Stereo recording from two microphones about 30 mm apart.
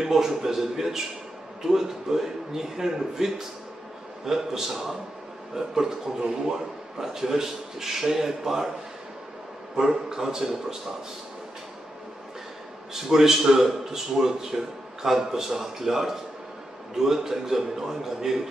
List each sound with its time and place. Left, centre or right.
0.0 s a man's voice: centre
9.8 s a man's voice: centre
12.9 s a man's voice: centre